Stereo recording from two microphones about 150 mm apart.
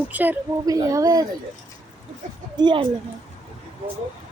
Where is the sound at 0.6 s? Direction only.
25° right (ahead or behind).